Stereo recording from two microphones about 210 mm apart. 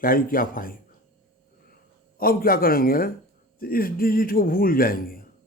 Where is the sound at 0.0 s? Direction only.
40° left (ahead or behind).